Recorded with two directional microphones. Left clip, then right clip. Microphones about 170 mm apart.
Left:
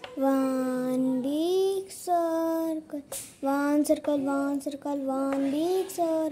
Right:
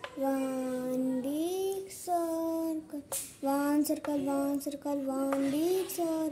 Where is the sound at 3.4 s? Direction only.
15° left (ahead or behind).